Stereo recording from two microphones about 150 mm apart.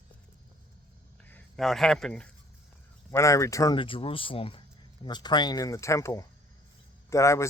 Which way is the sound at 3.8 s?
35° left (ahead or behind).